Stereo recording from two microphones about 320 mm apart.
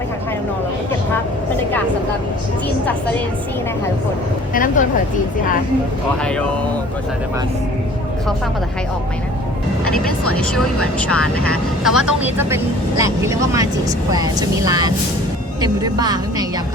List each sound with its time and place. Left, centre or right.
4.5 s speech: left
6.2 s speech: centre
10.3 s speech: centre